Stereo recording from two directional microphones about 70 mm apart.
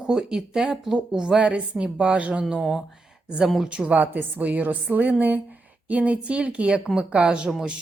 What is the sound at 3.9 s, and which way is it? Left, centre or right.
A woman's voice, right.